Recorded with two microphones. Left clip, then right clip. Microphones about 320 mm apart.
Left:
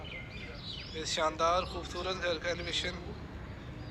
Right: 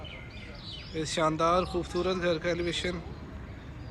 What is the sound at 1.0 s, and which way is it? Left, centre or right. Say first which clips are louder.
Speech: right 4 dB; centre.